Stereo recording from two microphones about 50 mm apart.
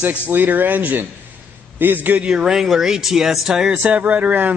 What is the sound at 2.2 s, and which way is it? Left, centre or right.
Speech, centre.